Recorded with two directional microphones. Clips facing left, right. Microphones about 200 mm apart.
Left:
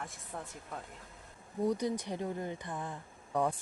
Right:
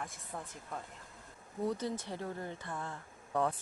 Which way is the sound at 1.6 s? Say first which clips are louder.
Left 4 dB; 15° left (ahead or behind).